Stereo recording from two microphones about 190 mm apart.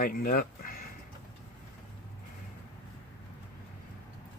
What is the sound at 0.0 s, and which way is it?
Speech, 50° left (ahead or behind).